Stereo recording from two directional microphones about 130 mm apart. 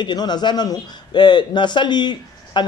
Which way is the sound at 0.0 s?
35° left (ahead or behind).